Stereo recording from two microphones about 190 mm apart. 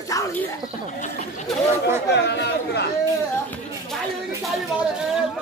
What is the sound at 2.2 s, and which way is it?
Chatter, 60° left (ahead or behind).